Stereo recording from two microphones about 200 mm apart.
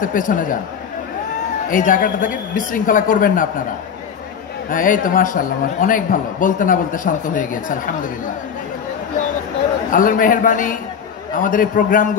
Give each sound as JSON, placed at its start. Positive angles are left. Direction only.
{"t": 0.0, "sound": "a man's voice", "side_deg": 40}
{"t": 1.7, "sound": "a man's voice", "side_deg": 40}
{"t": 4.6, "sound": "a man's voice", "side_deg": 45}
{"t": 9.8, "sound": "a man's voice", "side_deg": 40}